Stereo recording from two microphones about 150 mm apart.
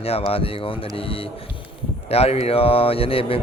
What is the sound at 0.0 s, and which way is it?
Speech, 40° left (ahead or behind).